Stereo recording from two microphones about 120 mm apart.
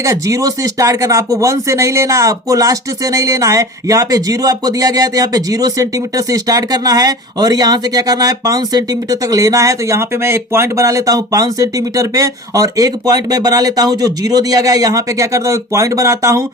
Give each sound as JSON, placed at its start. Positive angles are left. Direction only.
{"t": 0.0, "sound": "speech", "side_deg": -25}